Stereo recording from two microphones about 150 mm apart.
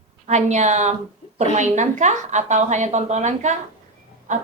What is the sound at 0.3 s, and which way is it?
A woman's voice, 50° right (ahead or behind).